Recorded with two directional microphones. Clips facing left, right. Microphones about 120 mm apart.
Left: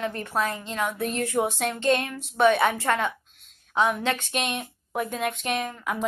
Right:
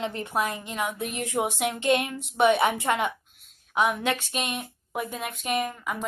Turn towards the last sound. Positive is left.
turn(degrees=0)  # may be behind; listen again after turning